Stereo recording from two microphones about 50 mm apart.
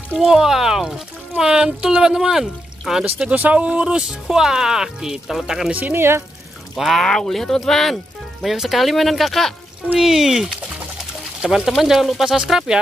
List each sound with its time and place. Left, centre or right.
0.1 s speech: centre
3.3 s speech: right; by 5.7 s centre
5.7 s speech: right
5.9 s speech: right
6.7 s speech: centre